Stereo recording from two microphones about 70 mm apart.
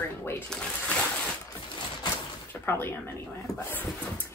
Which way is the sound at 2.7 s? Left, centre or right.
Left.